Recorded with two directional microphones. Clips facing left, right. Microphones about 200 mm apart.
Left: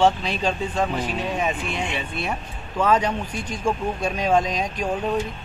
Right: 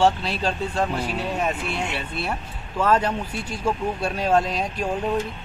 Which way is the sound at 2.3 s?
10° left (ahead or behind).